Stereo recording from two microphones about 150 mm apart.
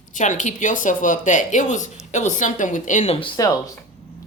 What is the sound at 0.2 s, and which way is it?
Speech, 55° left (ahead or behind).